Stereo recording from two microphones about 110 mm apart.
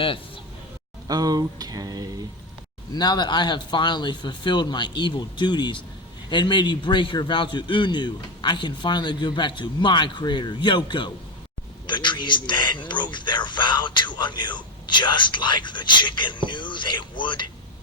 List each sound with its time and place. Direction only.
1.0 s speech: 35° right (ahead or behind)
2.9 s a man's voice: 40° left (ahead or behind)